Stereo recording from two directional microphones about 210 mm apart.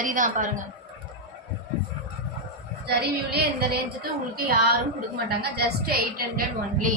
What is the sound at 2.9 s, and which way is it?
A woman's voice, 50° right (ahead or behind).